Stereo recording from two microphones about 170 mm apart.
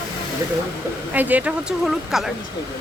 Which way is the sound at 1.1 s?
10° right (ahead or behind).